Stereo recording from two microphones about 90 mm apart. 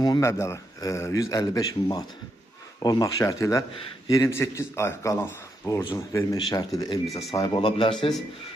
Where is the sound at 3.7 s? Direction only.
80° left.